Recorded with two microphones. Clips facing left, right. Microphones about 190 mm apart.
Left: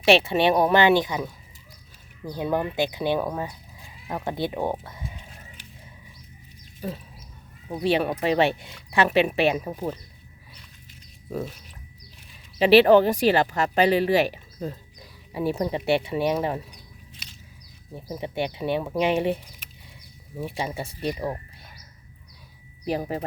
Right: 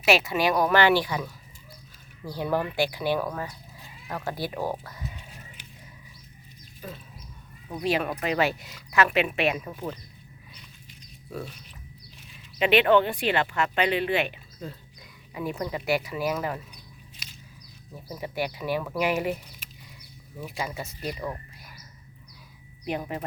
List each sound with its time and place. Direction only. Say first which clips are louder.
0.0 s speech: left 4 dB; 30° left (ahead or behind)
6.8 s speech: left 7 dB; 35° left (ahead or behind)
12.5 s speech: left 5 dB; 35° left (ahead or behind)
17.9 s speech: left 3 dB; 25° left (ahead or behind)
20.4 s speech: left 4 dB; 30° left (ahead or behind)
22.9 s speech: left 4 dB; 35° left (ahead or behind)